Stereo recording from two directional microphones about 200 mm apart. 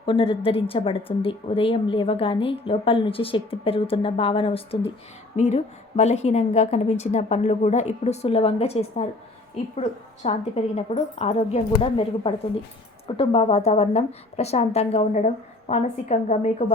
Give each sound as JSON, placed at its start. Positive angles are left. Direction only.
{"t": 0.0, "sound": "a woman's voice", "side_deg": 25}
{"t": 10.2, "sound": "a woman's voice", "side_deg": 30}